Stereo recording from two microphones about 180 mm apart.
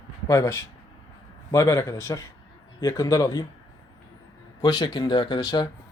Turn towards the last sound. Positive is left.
turn(degrees=25)  # may be behind; listen again after turning